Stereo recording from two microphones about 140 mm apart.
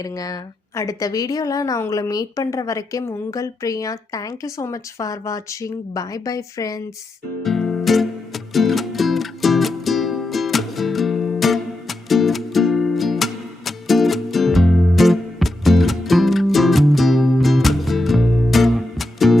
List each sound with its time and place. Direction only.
0.0 s a woman's voice: 25° left (ahead or behind)
7.4 s music: centre (ahead or behind)